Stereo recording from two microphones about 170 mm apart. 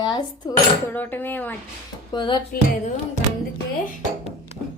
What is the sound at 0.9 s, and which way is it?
Speech, 10° left (ahead or behind).